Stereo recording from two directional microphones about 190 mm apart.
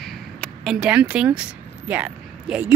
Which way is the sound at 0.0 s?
Centre (ahead or behind).